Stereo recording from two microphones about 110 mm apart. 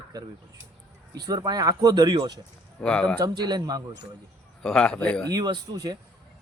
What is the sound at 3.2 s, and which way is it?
Speech, 40° right (ahead or behind).